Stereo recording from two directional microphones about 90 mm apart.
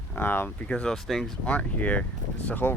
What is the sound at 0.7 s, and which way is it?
Speech, 5° left (ahead or behind).